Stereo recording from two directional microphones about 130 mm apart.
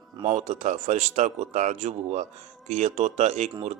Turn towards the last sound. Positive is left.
turn(degrees=-60)  # may be behind; listen again after turning